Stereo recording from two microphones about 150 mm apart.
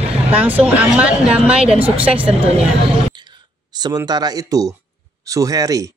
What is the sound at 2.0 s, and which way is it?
Speech, 10° right (ahead or behind).